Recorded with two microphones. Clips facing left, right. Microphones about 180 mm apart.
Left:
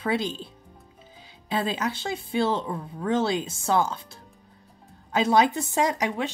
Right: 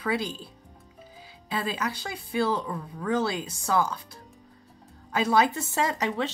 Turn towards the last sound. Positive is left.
turn(degrees=10)  # may be behind; listen again after turning